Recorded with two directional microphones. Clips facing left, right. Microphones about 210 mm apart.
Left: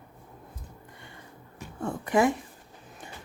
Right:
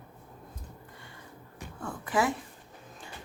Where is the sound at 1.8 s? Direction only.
25° left (ahead or behind).